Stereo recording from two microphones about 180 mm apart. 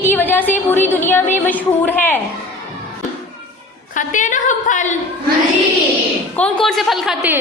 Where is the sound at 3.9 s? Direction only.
45° left (ahead or behind).